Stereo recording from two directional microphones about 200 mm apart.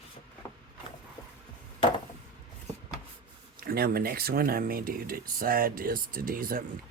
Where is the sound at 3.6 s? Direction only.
50° right (ahead or behind).